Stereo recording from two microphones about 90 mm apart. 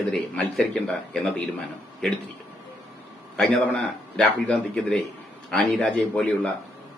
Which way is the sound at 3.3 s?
15° left (ahead or behind).